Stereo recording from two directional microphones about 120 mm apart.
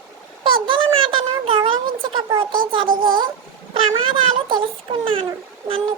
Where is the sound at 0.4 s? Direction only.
45° right (ahead or behind).